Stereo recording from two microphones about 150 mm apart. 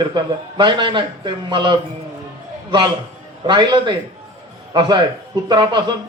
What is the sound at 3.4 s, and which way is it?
Speech, 30° right (ahead or behind).